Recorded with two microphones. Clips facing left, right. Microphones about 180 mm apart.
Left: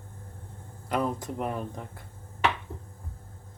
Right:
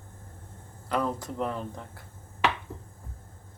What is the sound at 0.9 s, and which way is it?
Speech, 15° left (ahead or behind).